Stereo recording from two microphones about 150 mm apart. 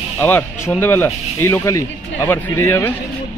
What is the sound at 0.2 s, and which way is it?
Speech, 15° left (ahead or behind).